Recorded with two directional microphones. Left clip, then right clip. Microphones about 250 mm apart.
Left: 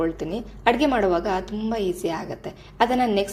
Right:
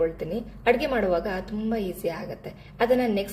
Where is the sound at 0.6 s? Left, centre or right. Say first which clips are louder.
Left 3 dB; centre.